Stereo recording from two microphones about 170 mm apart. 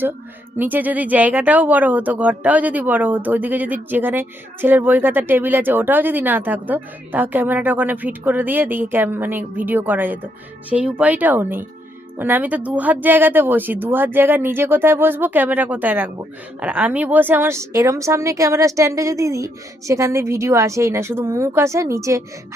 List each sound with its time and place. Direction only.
0.5 s speech: 10° right (ahead or behind)